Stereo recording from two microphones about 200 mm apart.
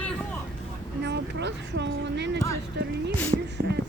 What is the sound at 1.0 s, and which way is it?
Speech, 60° right (ahead or behind).